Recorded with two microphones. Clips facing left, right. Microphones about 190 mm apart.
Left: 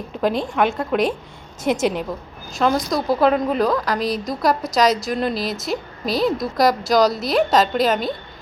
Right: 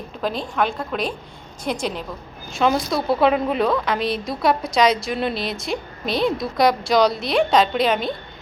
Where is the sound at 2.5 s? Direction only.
Centre (ahead or behind).